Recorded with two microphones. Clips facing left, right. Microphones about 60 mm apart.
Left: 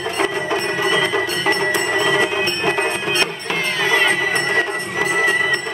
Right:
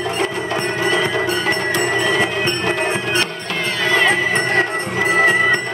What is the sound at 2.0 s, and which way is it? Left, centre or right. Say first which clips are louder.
Train: even; centre.